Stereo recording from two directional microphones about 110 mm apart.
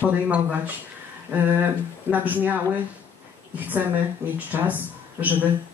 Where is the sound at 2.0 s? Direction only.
15° right (ahead or behind).